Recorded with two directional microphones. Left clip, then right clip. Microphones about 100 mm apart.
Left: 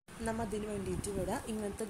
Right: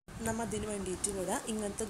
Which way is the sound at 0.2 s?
5° left (ahead or behind).